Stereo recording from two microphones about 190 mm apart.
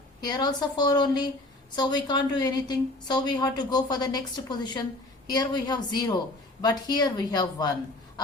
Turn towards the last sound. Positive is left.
turn(degrees=20)  # may be behind; listen again after turning